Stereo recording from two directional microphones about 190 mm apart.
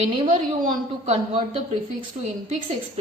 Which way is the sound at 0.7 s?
40° right (ahead or behind).